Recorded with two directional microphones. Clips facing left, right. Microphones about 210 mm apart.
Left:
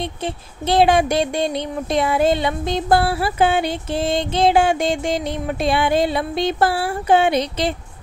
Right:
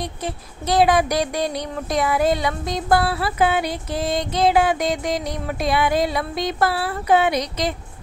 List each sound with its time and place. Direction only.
0.0 s speech: 25° left (ahead or behind)